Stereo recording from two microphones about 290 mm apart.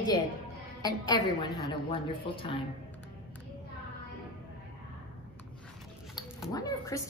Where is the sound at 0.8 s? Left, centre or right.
Centre.